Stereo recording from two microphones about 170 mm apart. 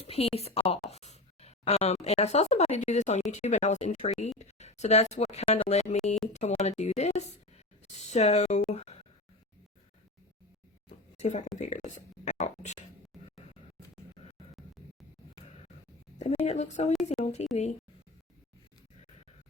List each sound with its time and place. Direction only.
0.0 s speech: 35° left (ahead or behind)
10.8 s a sound: 45° left (ahead or behind)
11.5 s speech: 45° left (ahead or behind)
16.4 s speech: 40° left (ahead or behind)